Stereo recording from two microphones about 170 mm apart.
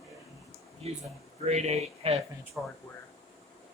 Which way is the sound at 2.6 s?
5° right (ahead or behind).